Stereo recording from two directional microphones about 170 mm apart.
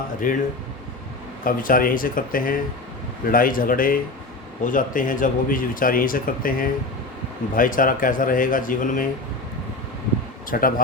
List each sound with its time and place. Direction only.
0.2 s a man's voice: 50° left (ahead or behind)
1.5 s a man's voice: 55° left (ahead or behind)
10.5 s speech: 55° left (ahead or behind)